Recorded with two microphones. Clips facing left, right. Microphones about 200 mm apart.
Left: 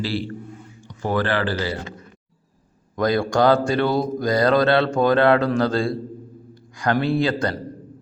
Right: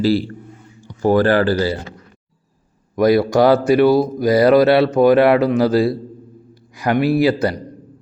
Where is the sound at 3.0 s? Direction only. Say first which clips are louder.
Right 6 dB; 5° right (ahead or behind).